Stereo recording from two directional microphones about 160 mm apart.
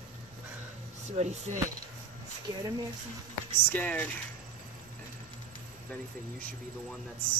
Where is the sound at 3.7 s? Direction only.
10° left (ahead or behind).